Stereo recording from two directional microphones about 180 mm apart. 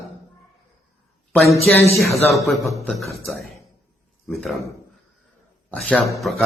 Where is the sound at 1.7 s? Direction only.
5° left (ahead or behind).